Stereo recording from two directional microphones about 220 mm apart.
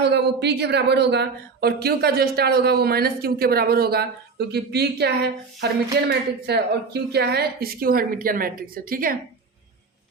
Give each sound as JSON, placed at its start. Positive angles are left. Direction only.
{"t": 0.0, "sound": "a woman's voice", "side_deg": -50}